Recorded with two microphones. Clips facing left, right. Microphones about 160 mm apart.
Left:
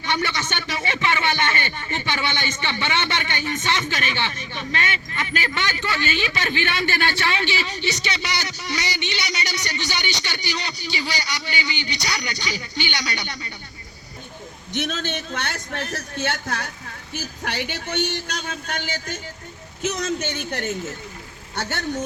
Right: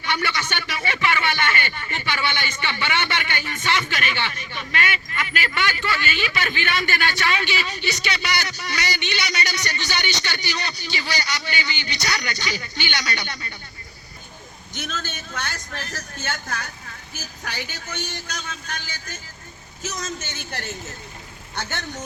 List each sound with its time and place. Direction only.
0.0 s speech: 25° left (ahead or behind)
14.8 s speech: 55° left (ahead or behind)